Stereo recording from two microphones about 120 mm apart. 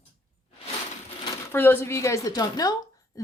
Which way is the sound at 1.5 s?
15° left (ahead or behind).